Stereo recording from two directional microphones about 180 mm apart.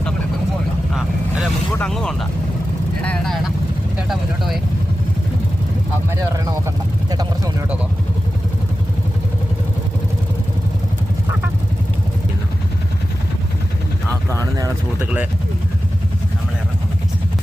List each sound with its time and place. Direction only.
1.7 s speech: 5° left (ahead or behind)
6.3 s speech: 20° right (ahead or behind)
14.1 s speech: 15° right (ahead or behind)